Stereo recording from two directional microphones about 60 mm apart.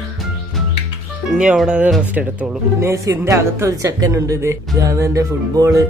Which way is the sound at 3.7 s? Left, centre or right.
Right.